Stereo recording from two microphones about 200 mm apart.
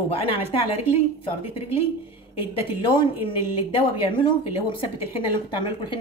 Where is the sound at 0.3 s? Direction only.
30° left (ahead or behind).